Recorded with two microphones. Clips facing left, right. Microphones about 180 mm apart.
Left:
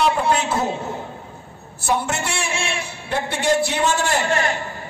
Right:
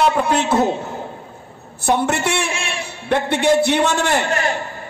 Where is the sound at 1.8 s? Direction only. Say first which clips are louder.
Right 4 dB; 65° right (ahead or behind).